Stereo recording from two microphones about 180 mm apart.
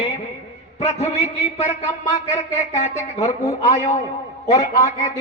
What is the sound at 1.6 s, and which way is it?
A man's voice, 40° left (ahead or behind).